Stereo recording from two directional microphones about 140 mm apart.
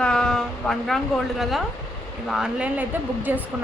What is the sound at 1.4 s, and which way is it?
A woman's voice, centre (ahead or behind).